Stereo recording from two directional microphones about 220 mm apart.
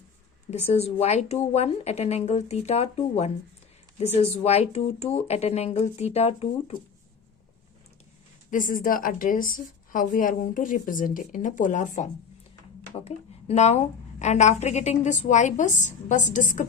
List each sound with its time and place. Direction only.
0.5 s speech: 30° left (ahead or behind)
8.4 s a woman's voice: 35° left (ahead or behind)